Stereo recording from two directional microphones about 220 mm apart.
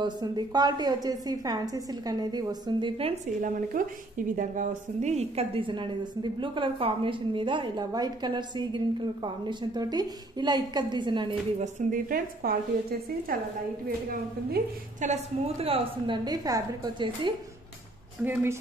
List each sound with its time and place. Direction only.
0.0 s a woman's voice: 20° right (ahead or behind)
11.9 s speech: 40° right (ahead or behind)
14.5 s a woman's voice: 35° right (ahead or behind)
18.2 s speech: 10° right (ahead or behind)